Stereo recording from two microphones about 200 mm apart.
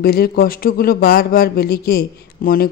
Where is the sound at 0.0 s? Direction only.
50° left (ahead or behind).